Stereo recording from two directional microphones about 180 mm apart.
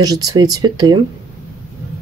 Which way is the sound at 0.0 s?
20° right (ahead or behind).